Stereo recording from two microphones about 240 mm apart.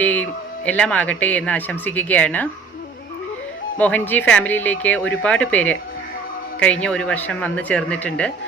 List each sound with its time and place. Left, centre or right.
0.0 s a woman's voice: centre
3.8 s speech: centre
6.8 s speech: centre